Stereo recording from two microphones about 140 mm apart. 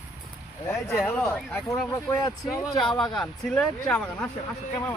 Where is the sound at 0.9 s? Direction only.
10° left (ahead or behind).